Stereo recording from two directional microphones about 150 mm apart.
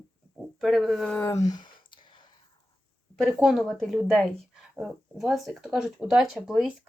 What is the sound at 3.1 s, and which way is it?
A woman's voice, centre (ahead or behind).